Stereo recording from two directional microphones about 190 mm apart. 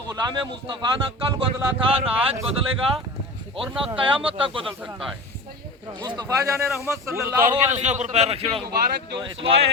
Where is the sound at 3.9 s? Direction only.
30° right (ahead or behind).